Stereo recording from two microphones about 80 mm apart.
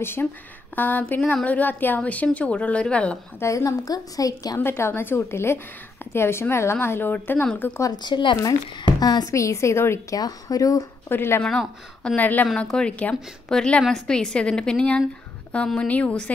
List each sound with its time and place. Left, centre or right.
0.0 s a woman's voice: left; by 3.2 s centre
3.3 s a woman's voice: left
4.6 s speech: left
8.0 s speech: left
8.8 s a woman's voice: left
9.3 s speech: left
10.1 s a woman's voice: left
11.1 s speech: left
11.4 s a woman's voice: centre
12.2 s a woman's voice: left